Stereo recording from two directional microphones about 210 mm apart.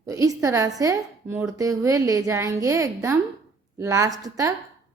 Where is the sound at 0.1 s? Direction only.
15° right (ahead or behind).